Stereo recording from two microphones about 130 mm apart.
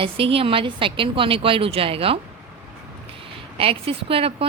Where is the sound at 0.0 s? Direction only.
45° right (ahead or behind).